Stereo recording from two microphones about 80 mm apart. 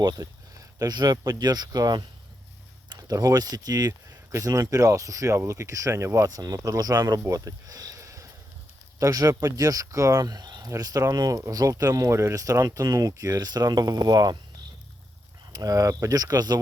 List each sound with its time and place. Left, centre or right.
0.0 s speech: right
2.9 s speech: right
15.5 s speech: right